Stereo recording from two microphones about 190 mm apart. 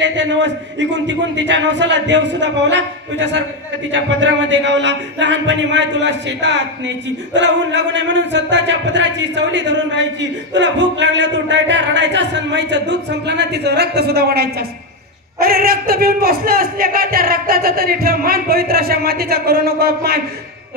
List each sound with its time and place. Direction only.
0.0 s a man's voice: 70° right (ahead or behind)